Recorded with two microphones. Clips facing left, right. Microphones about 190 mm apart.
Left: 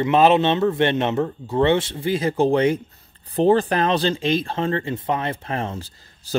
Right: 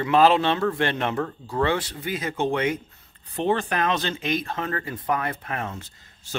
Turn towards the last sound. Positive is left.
turn(degrees=35)  # may be behind; listen again after turning